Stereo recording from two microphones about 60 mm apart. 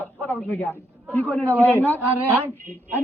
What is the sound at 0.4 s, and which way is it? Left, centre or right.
A man's voice, left.